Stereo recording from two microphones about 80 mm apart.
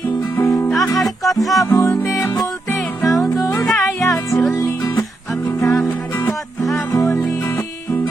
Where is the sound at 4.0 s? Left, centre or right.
Left.